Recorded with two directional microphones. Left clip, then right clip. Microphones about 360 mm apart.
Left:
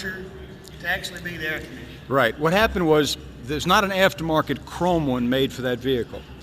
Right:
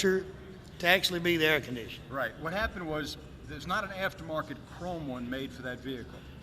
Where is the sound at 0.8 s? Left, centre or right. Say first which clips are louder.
Right 1 dB; right.